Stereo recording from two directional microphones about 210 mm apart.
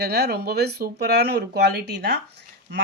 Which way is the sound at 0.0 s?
50° right (ahead or behind).